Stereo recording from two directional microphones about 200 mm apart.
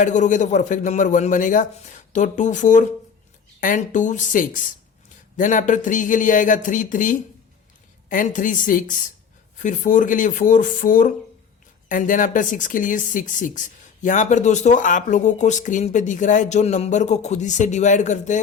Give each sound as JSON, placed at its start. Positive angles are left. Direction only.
{"t": 0.0, "sound": "speech", "side_deg": 40}